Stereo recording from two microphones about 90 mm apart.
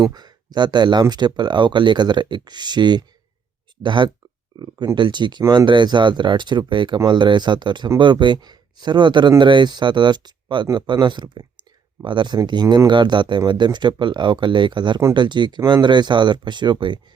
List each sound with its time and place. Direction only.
0.0 s speech: 50° right (ahead or behind)
4.5 s speech: 55° right (ahead or behind)